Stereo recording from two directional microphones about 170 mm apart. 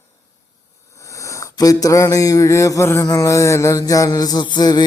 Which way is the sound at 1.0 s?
20° left (ahead or behind).